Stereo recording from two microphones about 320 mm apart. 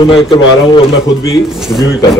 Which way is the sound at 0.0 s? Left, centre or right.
Centre.